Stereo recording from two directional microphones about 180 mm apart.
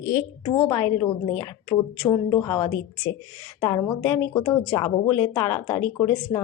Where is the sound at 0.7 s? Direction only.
15° left (ahead or behind).